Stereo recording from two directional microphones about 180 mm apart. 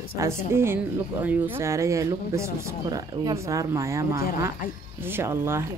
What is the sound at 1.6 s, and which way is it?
A woman's voice, 15° right (ahead or behind).